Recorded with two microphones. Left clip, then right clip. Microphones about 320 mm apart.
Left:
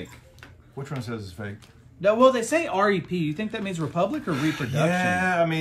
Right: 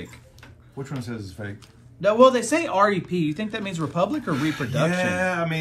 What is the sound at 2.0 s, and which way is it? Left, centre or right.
Speech, right.